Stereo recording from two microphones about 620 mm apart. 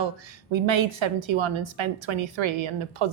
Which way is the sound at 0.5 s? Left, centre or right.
Right.